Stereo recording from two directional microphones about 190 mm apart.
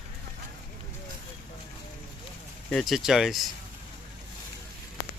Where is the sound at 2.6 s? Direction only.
Centre (ahead or behind).